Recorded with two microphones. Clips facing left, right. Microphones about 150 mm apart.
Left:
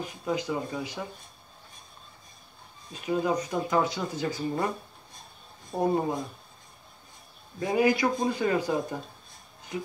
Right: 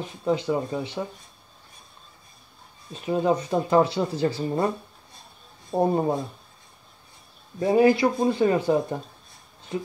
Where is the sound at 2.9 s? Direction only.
25° right (ahead or behind).